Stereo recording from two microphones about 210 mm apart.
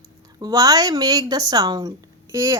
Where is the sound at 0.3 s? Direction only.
20° right (ahead or behind).